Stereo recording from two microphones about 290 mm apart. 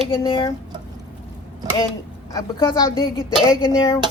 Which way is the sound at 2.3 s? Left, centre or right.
Centre.